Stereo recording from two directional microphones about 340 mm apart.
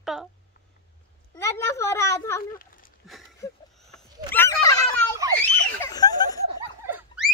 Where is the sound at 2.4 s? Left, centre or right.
Left.